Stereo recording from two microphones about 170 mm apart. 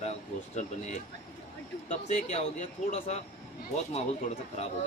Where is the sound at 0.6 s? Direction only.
45° left (ahead or behind).